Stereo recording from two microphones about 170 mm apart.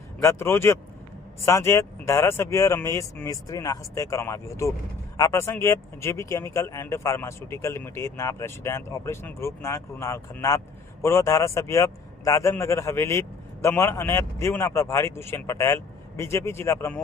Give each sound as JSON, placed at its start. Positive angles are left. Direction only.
{"t": 0.2, "sound": "a man's voice", "side_deg": 15}